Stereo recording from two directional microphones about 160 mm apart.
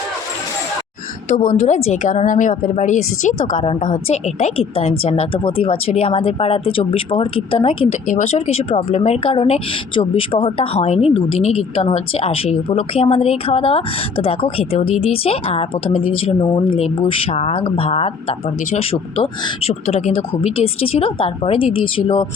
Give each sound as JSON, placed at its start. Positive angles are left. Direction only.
{"t": 1.3, "sound": "a woman's voice", "side_deg": 50}
{"t": 8.0, "sound": "a woman's voice", "side_deg": 50}